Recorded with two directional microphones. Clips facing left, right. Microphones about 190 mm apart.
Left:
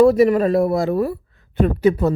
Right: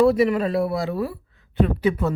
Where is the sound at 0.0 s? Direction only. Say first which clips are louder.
Left 5 dB; 45° left (ahead or behind).